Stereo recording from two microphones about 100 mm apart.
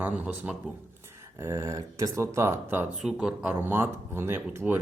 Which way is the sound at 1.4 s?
25° right (ahead or behind).